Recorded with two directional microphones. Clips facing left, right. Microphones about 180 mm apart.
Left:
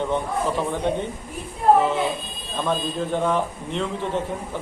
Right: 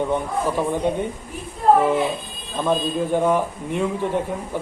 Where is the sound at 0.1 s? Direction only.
10° right (ahead or behind).